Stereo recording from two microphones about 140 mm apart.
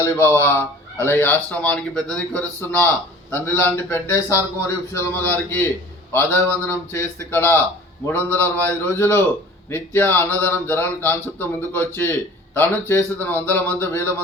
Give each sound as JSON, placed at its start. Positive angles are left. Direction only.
{"t": 0.0, "sound": "speech", "side_deg": 20}